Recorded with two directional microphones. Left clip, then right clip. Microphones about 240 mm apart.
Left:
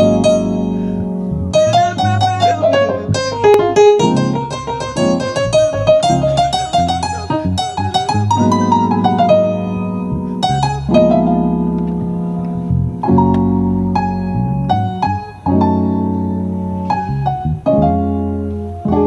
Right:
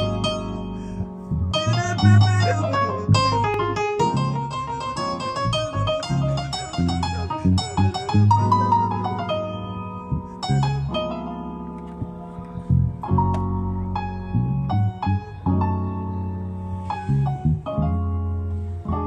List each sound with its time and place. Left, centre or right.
0.0 s music: left
1.5 s music: left
3.4 s music: left
7.9 s music: left
13.0 s music: left
15.4 s music: left
17.6 s music: left